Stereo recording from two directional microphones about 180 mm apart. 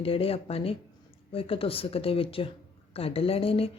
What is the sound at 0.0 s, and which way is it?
A woman's voice, 30° left (ahead or behind).